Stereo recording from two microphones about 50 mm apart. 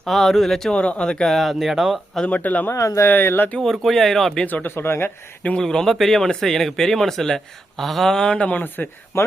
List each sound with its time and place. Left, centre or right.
0.0 s speech: centre
0.7 s speech: left
1.3 s speech: centre
2.2 s speech: left
2.7 s speech: left
3.1 s speech: left
3.6 s speech: centre
4.6 s speech: left
5.5 s speech: centre
8.4 s speech: left
9.1 s speech: left